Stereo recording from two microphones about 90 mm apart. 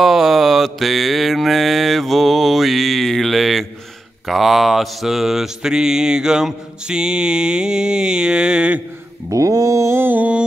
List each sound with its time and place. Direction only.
0.0 s mantra: 5° right (ahead or behind)
9.3 s mantra: 40° right (ahead or behind); by 10.4 s 20° right (ahead or behind)